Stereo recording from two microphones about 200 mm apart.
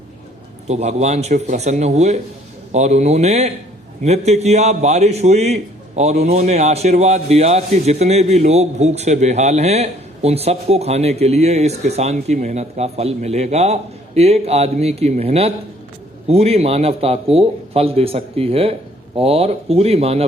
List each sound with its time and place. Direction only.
0.7 s a man's voice: 35° right (ahead or behind)